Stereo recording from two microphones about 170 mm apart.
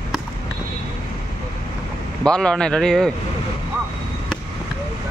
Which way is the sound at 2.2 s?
5° left (ahead or behind).